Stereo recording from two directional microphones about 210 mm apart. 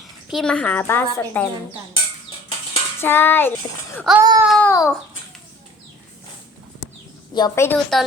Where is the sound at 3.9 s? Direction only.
Centre (ahead or behind).